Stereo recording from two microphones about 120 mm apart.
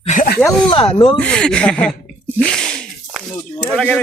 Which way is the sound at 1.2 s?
5° left (ahead or behind).